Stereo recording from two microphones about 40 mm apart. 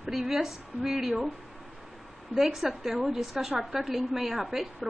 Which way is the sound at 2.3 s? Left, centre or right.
Centre.